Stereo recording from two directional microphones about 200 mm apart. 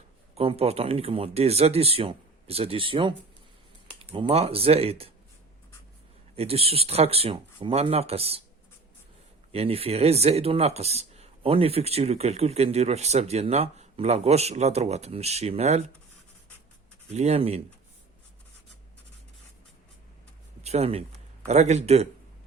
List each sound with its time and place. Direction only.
0.3 s speech: 30° right (ahead or behind)
6.3 s speech: 30° right (ahead or behind)
9.5 s speech: 30° right (ahead or behind)
17.1 s speech: 35° right (ahead or behind)
20.6 s a sound: 30° right (ahead or behind)
21.4 s speech: 35° right (ahead or behind)